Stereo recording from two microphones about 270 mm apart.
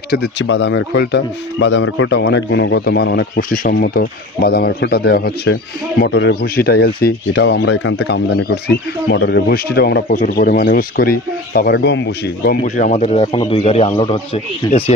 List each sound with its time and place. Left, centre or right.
0.1 s speech: left
12.6 s a man's voice: left